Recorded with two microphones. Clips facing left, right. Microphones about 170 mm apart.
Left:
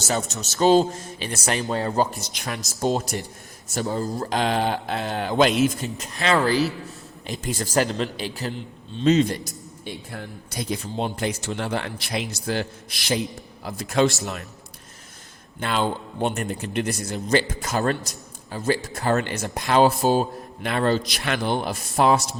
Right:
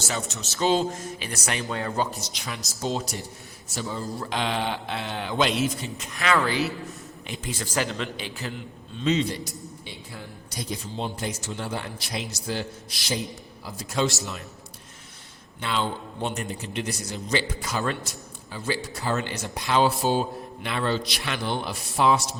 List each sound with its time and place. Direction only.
0.1 s a man's voice: 40° left (ahead or behind)
2.2 s a man's voice: 55° left (ahead or behind); by 8.5 s 35° left (ahead or behind)
9.0 s a man's voice: 45° left (ahead or behind)
15.6 s a man's voice: 50° left (ahead or behind)